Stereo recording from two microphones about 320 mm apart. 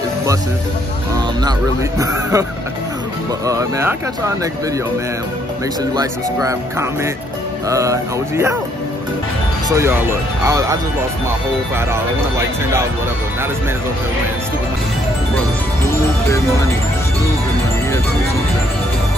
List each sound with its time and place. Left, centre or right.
1.1 s speech: centre
3.4 s speech: centre
5.9 s speech: centre
9.7 s speech: centre